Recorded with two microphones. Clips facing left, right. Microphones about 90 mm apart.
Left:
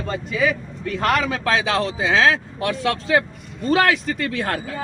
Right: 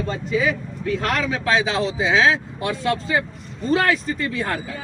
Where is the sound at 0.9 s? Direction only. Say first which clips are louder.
Left 4 dB; 50° left (ahead or behind).